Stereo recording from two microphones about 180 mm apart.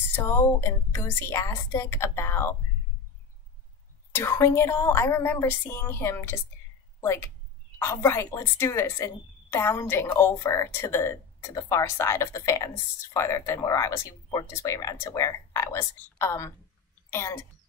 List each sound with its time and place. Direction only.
0.1 s a woman's voice: 15° left (ahead or behind)
4.1 s a woman's voice: 15° left (ahead or behind)